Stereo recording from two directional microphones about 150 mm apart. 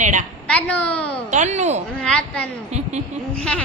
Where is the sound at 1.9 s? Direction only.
5° left (ahead or behind).